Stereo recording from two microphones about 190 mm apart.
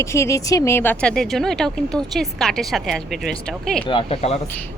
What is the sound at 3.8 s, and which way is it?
Speech, 30° left (ahead or behind).